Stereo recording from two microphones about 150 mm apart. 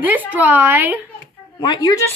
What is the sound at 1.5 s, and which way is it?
Speech, 30° left (ahead or behind).